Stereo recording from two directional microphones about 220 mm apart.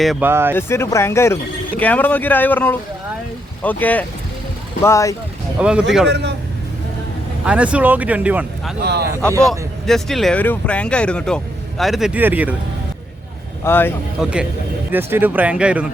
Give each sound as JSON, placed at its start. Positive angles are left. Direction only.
{"t": 0.0, "sound": "speech", "side_deg": -5}
{"t": 0.5, "sound": "speech", "side_deg": 10}
{"t": 5.5, "sound": "speech", "side_deg": -5}
{"t": 6.1, "sound": "a man's voice", "side_deg": -50}
{"t": 7.4, "sound": "speech", "side_deg": -5}
{"t": 8.8, "sound": "a man's voice", "side_deg": -50}
{"t": 9.5, "sound": "speech", "side_deg": 0}
{"t": 13.7, "sound": "speech", "side_deg": 10}
{"t": 14.2, "sound": "speech", "side_deg": -5}